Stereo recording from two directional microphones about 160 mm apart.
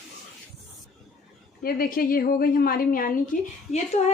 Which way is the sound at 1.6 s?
65° left (ahead or behind).